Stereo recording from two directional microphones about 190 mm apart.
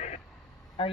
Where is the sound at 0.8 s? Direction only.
30° left (ahead or behind).